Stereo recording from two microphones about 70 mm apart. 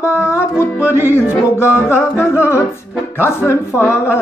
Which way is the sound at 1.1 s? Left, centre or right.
Left.